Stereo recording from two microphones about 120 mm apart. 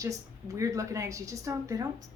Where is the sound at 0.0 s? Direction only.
25° right (ahead or behind).